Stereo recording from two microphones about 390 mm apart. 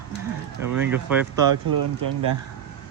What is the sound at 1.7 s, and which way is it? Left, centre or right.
Speech, right.